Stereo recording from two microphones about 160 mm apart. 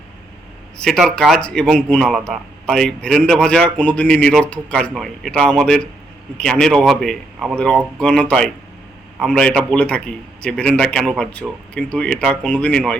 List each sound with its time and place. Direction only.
0.8 s a man's voice: 5° left (ahead or behind)